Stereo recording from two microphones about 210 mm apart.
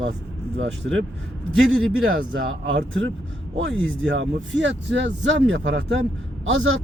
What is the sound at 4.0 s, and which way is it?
Speech, 65° right (ahead or behind).